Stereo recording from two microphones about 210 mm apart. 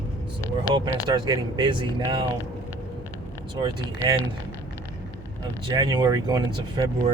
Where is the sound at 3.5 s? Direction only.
20° right (ahead or behind).